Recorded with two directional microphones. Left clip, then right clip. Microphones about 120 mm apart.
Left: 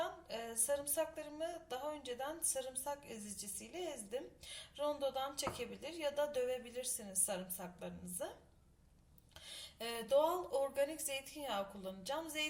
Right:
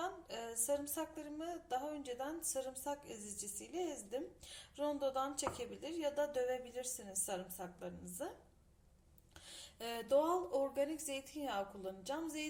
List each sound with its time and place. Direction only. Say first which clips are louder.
0.0 s a sound: left 1 dB; 40° right (ahead or behind)
3.6 s a woman's voice: right 3 dB; 40° right (ahead or behind)
9.5 s a woman's voice: left 1 dB; 40° right (ahead or behind)